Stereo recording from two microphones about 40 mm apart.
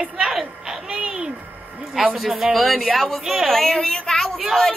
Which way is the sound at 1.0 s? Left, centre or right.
Right.